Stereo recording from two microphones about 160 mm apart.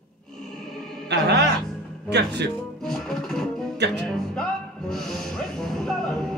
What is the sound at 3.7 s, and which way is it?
Music, 90° right.